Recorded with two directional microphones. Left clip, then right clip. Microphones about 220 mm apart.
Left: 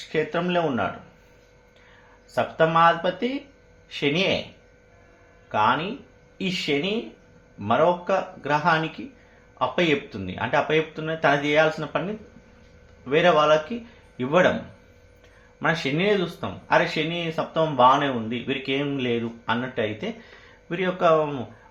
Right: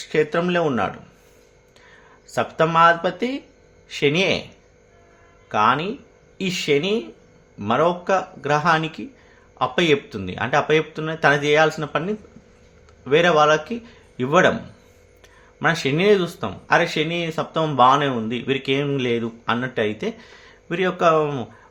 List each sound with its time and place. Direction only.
0.1 s speech: 45° right (ahead or behind)
2.3 s speech: 50° right (ahead or behind)
5.5 s speech: 50° right (ahead or behind)
13.1 s speech: 50° right (ahead or behind)
15.5 s speech: 50° right (ahead or behind)